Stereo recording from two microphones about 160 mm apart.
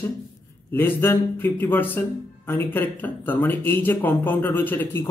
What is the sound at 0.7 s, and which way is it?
Speech, 15° left (ahead or behind).